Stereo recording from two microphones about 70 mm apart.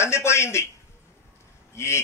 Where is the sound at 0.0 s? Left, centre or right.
Left.